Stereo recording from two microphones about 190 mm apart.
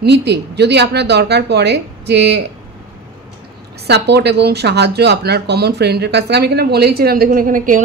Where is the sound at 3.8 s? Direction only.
60° right (ahead or behind).